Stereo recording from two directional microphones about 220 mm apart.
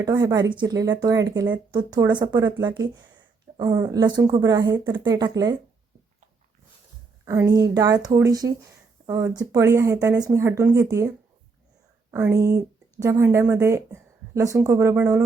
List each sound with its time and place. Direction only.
0.0 s speech: 15° right (ahead or behind)
7.3 s speech: 15° right (ahead or behind)
12.1 s speech: 15° right (ahead or behind)